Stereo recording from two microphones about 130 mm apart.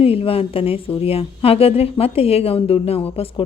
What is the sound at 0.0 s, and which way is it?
Speech, 45° left (ahead or behind).